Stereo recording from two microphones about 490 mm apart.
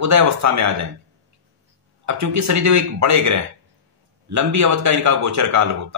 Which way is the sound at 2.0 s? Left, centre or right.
Right.